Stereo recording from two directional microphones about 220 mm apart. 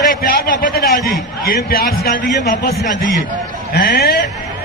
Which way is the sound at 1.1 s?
45° left (ahead or behind).